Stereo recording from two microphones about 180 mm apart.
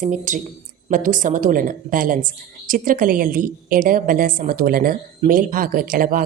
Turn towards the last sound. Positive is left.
turn(degrees=-50)  # may be behind; listen again after turning